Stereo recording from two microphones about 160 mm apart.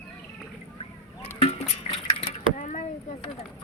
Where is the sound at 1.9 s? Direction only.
35° left (ahead or behind).